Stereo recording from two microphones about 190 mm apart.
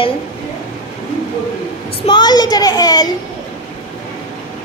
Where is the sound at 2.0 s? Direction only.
25° left (ahead or behind).